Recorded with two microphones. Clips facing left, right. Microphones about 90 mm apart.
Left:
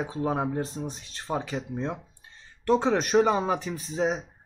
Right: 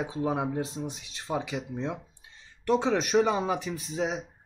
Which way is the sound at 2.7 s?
40° left (ahead or behind).